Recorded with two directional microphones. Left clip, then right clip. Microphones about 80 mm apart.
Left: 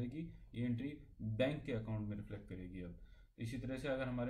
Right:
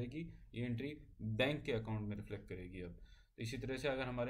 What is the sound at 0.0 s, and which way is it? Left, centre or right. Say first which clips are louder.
Speech: even; right.